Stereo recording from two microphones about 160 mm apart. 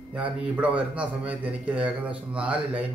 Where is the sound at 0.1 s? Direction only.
5° right (ahead or behind).